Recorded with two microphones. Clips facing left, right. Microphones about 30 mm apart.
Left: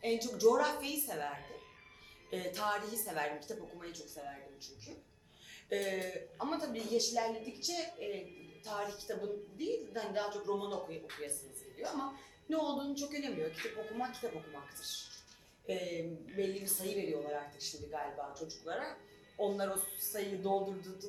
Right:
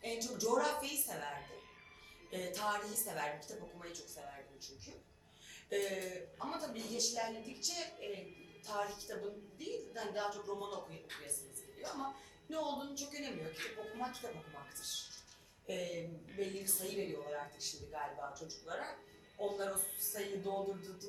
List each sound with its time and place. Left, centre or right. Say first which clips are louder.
0.0 s a woman's voice: left 9 dB; left
3.6 s a woman's voice: left 2 dB; centre
5.6 s a woman's voice: left 2 dB; centre
10.8 s a woman's voice: left 5 dB; centre
15.6 s a woman's voice: left 3 dB; centre